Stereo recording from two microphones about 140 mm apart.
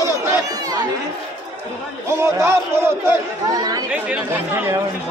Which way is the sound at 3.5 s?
30° right (ahead or behind).